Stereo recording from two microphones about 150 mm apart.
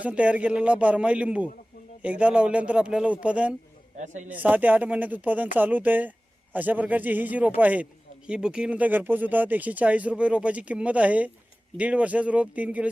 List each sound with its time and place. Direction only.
0.0 s speech: 10° right (ahead or behind)
3.9 s a man's voice: 55° right (ahead or behind)
4.3 s speech: 10° right (ahead or behind)